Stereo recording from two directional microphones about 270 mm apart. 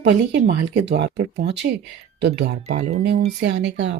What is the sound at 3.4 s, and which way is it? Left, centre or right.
Speech, right.